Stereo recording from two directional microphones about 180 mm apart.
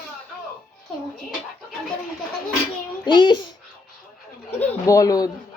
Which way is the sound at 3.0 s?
25° left (ahead or behind).